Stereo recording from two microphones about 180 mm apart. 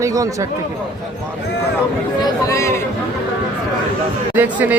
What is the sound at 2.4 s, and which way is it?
Speech, 15° left (ahead or behind).